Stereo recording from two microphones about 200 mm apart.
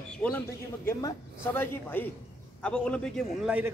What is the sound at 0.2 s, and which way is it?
A man's voice, 5° left (ahead or behind).